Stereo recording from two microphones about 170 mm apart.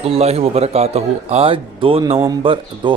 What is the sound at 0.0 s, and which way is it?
A man's voice, 35° right (ahead or behind).